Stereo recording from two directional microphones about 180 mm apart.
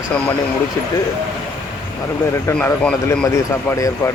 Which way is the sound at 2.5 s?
10° left (ahead or behind).